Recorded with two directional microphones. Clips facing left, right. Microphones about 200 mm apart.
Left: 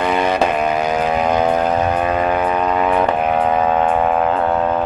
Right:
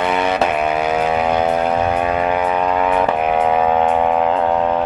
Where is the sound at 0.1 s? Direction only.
10° left (ahead or behind).